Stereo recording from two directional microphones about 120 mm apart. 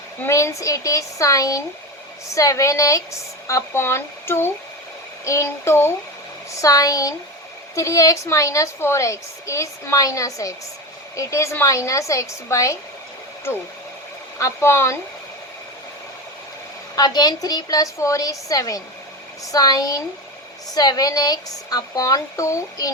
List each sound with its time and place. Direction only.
0.2 s a woman's voice: 25° left (ahead or behind)
14.3 s a woman's voice: 25° left (ahead or behind)
16.9 s speech: 35° left (ahead or behind)